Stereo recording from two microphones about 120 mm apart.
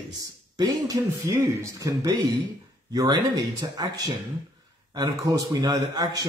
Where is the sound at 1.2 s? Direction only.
25° right (ahead or behind).